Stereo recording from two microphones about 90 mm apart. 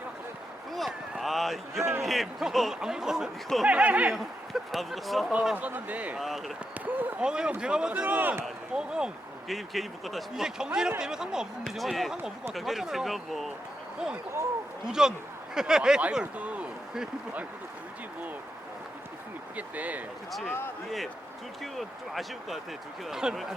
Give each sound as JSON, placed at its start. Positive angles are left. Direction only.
{"t": 1.2, "sound": "a sound", "side_deg": 0}
{"t": 1.8, "sound": "speech", "side_deg": -30}
{"t": 2.0, "sound": "speech", "side_deg": 0}
{"t": 3.7, "sound": "speech", "side_deg": -15}
{"t": 4.1, "sound": "speech", "side_deg": 0}
{"t": 6.1, "sound": "speech", "side_deg": 0}
{"t": 6.8, "sound": "a sound", "side_deg": -20}
{"t": 7.3, "sound": "speech", "side_deg": -10}
{"t": 8.7, "sound": "speech", "side_deg": -10}
{"t": 14.8, "sound": "speech", "side_deg": -5}
{"t": 19.5, "sound": "speech", "side_deg": -15}
{"t": 21.6, "sound": "speech", "side_deg": 0}